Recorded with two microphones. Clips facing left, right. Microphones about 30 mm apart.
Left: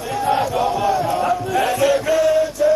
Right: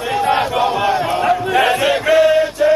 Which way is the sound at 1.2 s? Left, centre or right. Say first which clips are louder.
Right 4 dB; right.